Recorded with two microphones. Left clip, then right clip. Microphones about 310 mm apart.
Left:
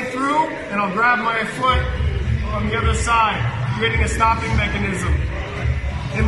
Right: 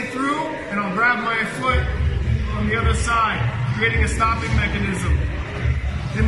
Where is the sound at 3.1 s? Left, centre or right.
Centre.